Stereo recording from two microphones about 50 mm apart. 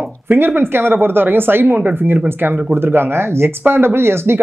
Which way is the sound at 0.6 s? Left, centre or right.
Right.